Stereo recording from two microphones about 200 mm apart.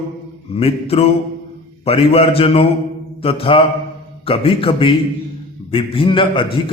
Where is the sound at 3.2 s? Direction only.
30° left (ahead or behind).